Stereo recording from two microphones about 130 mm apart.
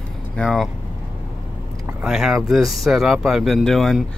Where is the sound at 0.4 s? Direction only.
Centre (ahead or behind).